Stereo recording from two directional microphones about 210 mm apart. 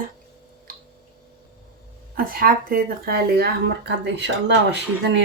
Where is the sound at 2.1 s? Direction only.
45° right (ahead or behind).